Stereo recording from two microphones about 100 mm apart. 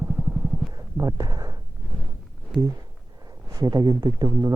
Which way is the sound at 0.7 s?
40° right (ahead or behind).